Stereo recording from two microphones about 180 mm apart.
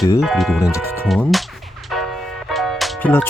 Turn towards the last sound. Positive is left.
turn(degrees=0)  # may be behind; listen again after turning